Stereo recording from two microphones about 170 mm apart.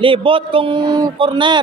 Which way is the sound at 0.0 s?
30° right (ahead or behind).